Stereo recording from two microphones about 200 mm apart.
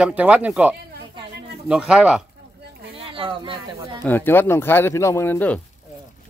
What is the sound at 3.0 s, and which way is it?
Speech, 25° right (ahead or behind).